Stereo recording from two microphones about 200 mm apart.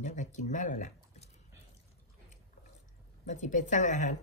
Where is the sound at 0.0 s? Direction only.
40° left (ahead or behind).